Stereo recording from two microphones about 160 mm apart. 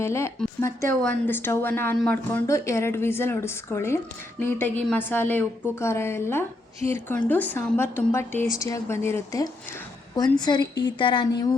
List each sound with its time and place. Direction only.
0.0 s a woman's voice: 15° left (ahead or behind)
10.4 s a woman's voice: 30° left (ahead or behind)